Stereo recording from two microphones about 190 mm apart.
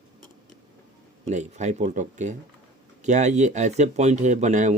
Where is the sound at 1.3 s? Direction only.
40° right (ahead or behind).